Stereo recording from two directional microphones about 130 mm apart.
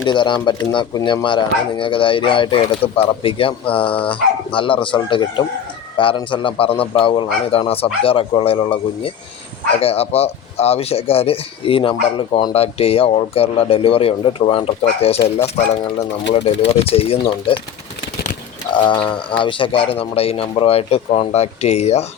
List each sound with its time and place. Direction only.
0.1 s a man's voice: 35° left (ahead or behind)
12.5 s a man's voice: 50° left (ahead or behind)
16.3 s a man's voice: 50° left (ahead or behind)
18.9 s a man's voice: 40° left (ahead or behind)